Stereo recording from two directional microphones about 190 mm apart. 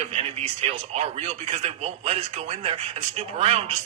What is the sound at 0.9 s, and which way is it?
Speech, 35° right (ahead or behind).